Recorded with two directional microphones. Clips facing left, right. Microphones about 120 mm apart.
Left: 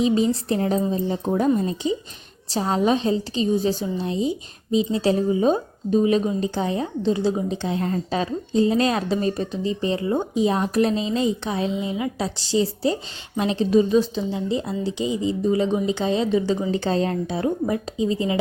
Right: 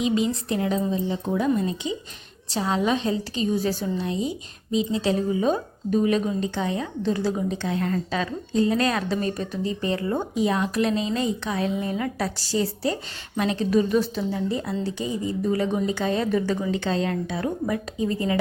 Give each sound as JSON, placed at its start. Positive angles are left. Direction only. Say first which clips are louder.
{"t": 0.0, "sound": "a woman's voice", "louder": "left 4 dB", "side_deg": 35}
{"t": 10.5, "sound": "a woman's voice", "louder": "left 3 dB", "side_deg": 35}
{"t": 12.4, "sound": "a woman's voice", "louder": "left 6 dB", "side_deg": 25}
{"t": 16.7, "sound": "speech", "louder": "left 3 dB", "side_deg": 35}